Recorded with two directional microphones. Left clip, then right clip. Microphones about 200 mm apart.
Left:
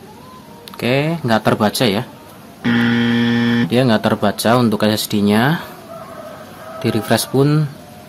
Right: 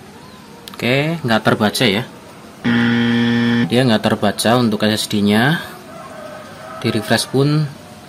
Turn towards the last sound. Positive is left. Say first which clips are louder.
# left 1 dB
turn(degrees=10)  # may be behind; listen again after turning